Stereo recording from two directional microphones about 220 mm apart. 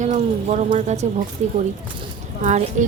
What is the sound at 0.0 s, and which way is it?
A woman's voice, 35° right (ahead or behind).